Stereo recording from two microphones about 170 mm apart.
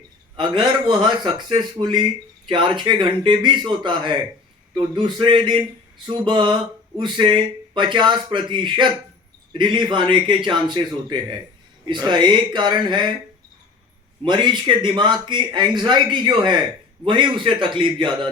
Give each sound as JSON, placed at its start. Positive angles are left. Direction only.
{"t": 0.3, "sound": "a man's voice", "side_deg": -25}
{"t": 14.3, "sound": "a man's voice", "side_deg": -25}